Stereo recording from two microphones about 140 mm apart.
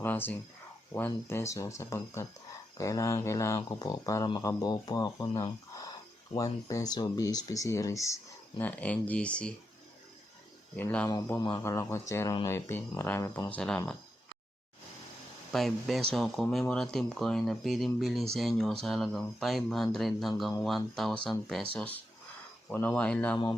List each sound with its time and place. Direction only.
0.0 s speech: 15° left (ahead or behind)
10.8 s speech: 15° left (ahead or behind)
13.5 s speech: 10° left (ahead or behind)
15.5 s speech: centre (ahead or behind)